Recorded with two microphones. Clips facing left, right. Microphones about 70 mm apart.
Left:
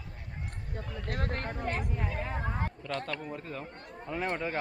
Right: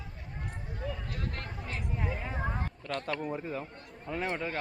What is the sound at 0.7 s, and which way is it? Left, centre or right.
Speech, left.